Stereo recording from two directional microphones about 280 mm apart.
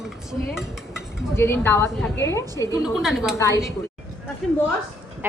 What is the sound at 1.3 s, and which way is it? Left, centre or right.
A woman's voice, centre.